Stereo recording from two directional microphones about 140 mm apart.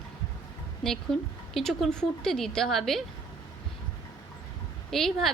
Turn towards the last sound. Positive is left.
turn(degrees=0)  # may be behind; listen again after turning